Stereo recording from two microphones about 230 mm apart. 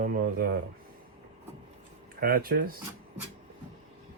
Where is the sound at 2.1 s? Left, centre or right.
Right.